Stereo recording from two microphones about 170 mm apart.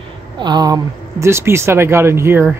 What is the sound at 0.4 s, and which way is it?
Speech, 25° right (ahead or behind).